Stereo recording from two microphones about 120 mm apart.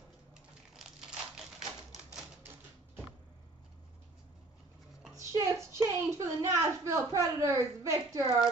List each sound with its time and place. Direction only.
0.7 s crushing: 5° right (ahead or behind)
5.1 s a sound: 25° right (ahead or behind)
6.5 s speech: 25° right (ahead or behind)